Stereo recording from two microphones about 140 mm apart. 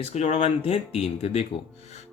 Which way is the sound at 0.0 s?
50° left (ahead or behind).